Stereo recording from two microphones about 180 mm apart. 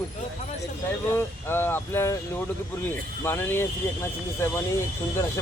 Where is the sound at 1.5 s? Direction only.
10° left (ahead or behind).